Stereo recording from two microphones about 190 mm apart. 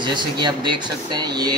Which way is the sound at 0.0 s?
25° right (ahead or behind).